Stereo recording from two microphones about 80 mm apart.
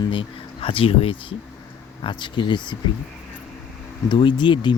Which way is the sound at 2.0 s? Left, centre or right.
Left.